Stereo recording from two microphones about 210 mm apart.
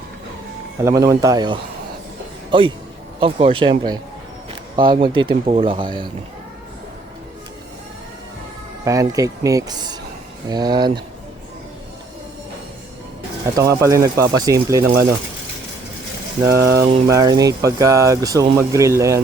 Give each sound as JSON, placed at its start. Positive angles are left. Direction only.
{"t": 0.9, "sound": "a man's voice", "side_deg": -15}
{"t": 8.8, "sound": "speech", "side_deg": -15}
{"t": 13.6, "sound": "speech", "side_deg": -15}
{"t": 16.5, "sound": "speech", "side_deg": -15}